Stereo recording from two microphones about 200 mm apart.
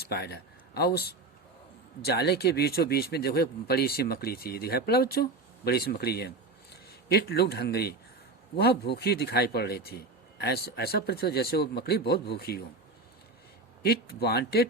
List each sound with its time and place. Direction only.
0.1 s a man's voice: 55° left (ahead or behind)
13.8 s speech: 50° left (ahead or behind)